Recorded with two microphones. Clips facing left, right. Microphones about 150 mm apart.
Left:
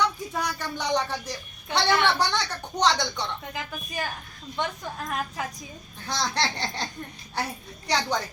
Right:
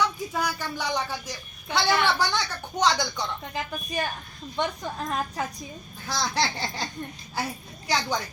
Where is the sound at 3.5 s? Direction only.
20° right (ahead or behind).